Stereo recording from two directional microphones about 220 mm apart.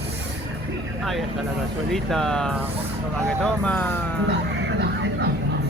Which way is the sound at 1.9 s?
Centre (ahead or behind).